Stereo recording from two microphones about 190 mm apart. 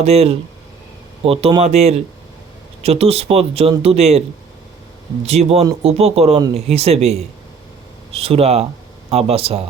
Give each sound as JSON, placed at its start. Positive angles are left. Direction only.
{"t": 0.0, "sound": "speech", "side_deg": -35}
{"t": 5.2, "sound": "speech", "side_deg": -35}